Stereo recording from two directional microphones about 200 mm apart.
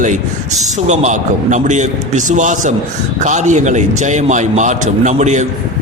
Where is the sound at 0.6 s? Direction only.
35° right (ahead or behind).